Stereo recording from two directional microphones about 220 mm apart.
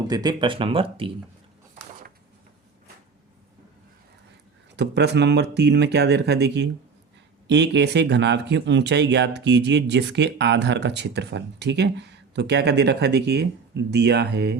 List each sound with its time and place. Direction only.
0.1 s speech: 20° right (ahead or behind)
4.8 s speech: 50° right (ahead or behind)